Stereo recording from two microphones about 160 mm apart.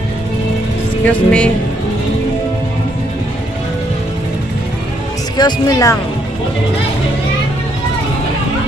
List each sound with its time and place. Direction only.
1.0 s speech: 5° left (ahead or behind)
5.4 s speech: 25° left (ahead or behind)